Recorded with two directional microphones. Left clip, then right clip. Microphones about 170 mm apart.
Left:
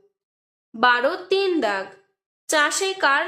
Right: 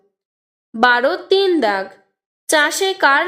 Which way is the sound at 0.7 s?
40° right (ahead or behind).